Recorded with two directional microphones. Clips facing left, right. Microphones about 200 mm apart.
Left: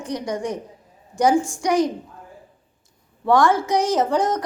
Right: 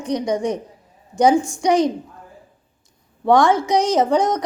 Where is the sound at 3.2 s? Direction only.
20° right (ahead or behind).